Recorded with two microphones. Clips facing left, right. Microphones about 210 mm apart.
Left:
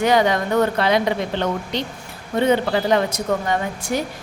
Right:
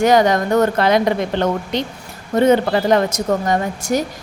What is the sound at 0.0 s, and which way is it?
A woman's voice, 45° right (ahead or behind).